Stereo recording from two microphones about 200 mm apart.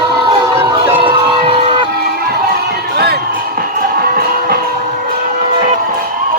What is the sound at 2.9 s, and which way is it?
Music, 55° right (ahead or behind).